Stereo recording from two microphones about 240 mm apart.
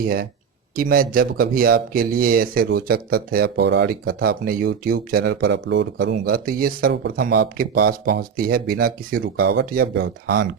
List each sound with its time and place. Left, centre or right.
0.8 s speech: right